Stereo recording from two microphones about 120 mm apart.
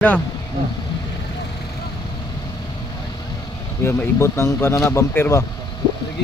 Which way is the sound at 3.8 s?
20° left (ahead or behind).